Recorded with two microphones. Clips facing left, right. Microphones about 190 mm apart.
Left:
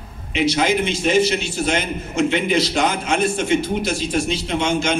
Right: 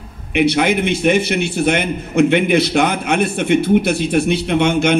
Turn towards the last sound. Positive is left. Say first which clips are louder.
# right 5 dB
turn(degrees=-60)  # may be behind; listen again after turning